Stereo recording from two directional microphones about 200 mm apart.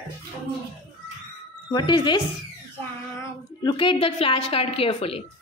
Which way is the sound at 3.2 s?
20° left (ahead or behind).